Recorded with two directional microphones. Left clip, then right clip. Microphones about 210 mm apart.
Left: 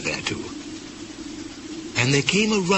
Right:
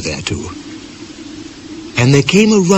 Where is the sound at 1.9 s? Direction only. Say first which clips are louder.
Right 9 dB; 20° left (ahead or behind).